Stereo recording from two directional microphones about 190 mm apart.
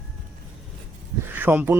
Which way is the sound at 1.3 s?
10° right (ahead or behind).